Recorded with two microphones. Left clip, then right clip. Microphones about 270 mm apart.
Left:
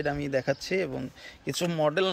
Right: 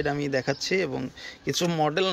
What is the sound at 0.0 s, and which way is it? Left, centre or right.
Speech, centre.